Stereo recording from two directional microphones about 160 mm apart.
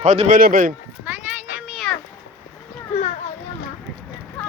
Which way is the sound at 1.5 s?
Centre (ahead or behind).